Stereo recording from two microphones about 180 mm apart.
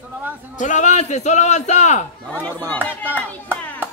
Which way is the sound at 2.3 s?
10° left (ahead or behind).